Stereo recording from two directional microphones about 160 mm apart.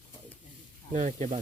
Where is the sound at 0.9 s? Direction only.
50° right (ahead or behind).